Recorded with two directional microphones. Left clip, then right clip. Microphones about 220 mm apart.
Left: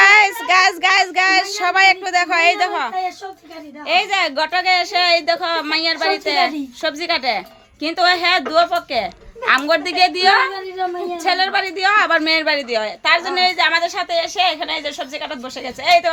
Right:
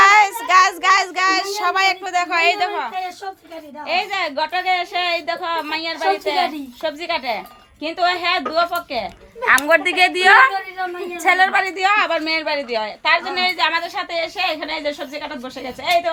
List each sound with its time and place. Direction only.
0.0 s child singing: 25° left (ahead or behind)
3.8 s a woman's voice: 35° left (ahead or behind)
9.5 s a woman's voice: 25° left (ahead or behind)
11.2 s a woman's voice: 10° left (ahead or behind)
11.9 s a woman's voice: 35° left (ahead or behind)